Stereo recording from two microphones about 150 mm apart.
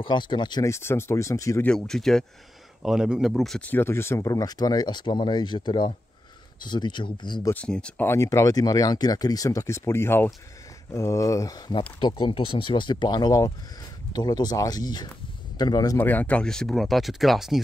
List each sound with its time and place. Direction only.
0.0 s speech: 30° left (ahead or behind)
0.7 s speech: 15° left (ahead or behind)
1.7 s speech: 5° left (ahead or behind); by 7.5 s 30° left (ahead or behind)
7.5 s speech: 5° left (ahead or behind); by 16.0 s 25° left (ahead or behind)
16.0 s speech: 10° left (ahead or behind)